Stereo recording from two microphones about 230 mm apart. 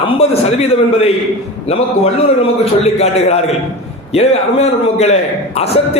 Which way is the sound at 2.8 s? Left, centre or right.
Left.